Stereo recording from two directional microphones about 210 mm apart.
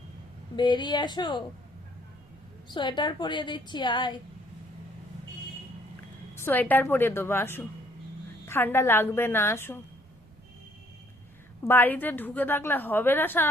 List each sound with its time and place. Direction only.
0.5 s a woman's voice: 20° left (ahead or behind)
2.6 s a woman's voice: 20° left (ahead or behind)
6.3 s a woman's voice: 10° left (ahead or behind)
11.6 s a woman's voice: 10° left (ahead or behind)